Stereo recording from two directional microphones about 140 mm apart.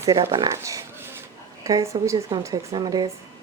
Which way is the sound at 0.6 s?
20° right (ahead or behind).